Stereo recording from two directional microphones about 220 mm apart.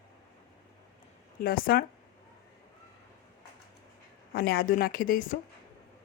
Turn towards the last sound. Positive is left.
turn(degrees=40)  # may be behind; listen again after turning